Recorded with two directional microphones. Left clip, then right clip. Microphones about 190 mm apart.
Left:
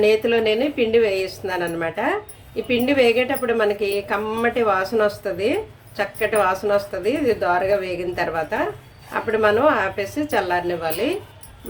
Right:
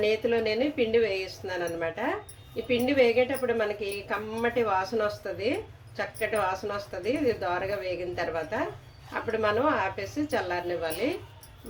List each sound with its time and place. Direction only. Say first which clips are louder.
0.0 s a woman's voice: left 8 dB; 20° left (ahead or behind)